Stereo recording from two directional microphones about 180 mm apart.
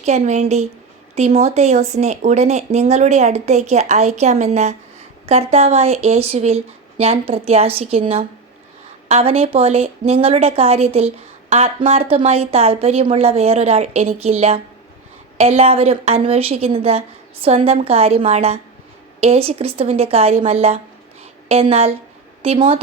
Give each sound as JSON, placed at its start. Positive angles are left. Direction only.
{"t": 0.0, "sound": "a woman's voice", "side_deg": -40}